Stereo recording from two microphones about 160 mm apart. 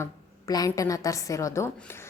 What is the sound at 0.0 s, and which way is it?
A woman's voice, 20° left (ahead or behind).